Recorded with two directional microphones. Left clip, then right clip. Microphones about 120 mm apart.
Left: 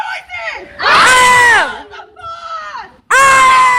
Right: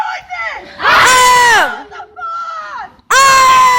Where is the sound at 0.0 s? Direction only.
15° right (ahead or behind).